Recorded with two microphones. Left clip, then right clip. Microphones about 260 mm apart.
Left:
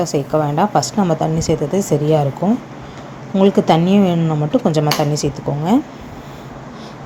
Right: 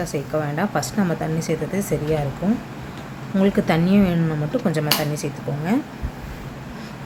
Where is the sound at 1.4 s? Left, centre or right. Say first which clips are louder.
Left 7 dB; centre.